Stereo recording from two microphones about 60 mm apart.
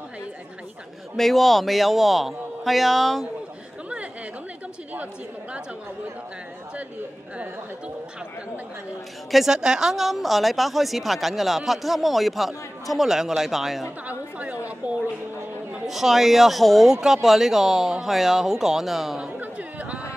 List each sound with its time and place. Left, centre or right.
1.1 s speech: centre
9.3 s speech: centre
14.0 s a woman's voice: right
15.9 s speech: centre
19.3 s a sound: right